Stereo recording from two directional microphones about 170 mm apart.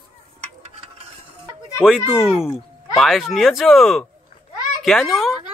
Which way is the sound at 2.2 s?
5° right (ahead or behind).